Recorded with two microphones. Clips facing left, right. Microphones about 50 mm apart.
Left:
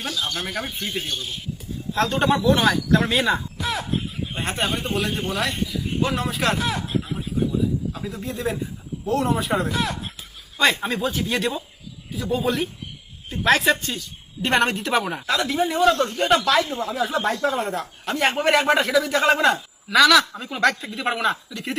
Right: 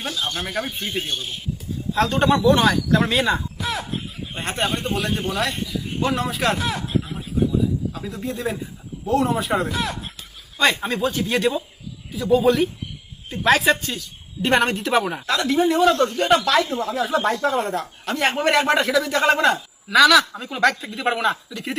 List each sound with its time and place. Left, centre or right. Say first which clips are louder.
0.1 s speech: even; right
0.4 s speech: right 2 dB; centre
0.7 s speech: right 2 dB; right
2.0 s speech: right 2 dB; centre